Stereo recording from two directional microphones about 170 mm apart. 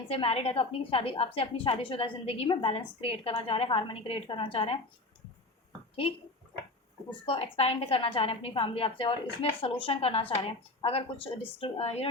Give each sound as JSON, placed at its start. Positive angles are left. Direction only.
{"t": 0.1, "sound": "a woman's voice", "side_deg": 35}
{"t": 7.1, "sound": "a woman's voice", "side_deg": 35}